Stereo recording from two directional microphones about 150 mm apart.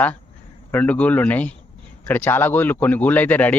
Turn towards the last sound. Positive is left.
turn(degrees=10)  # may be behind; listen again after turning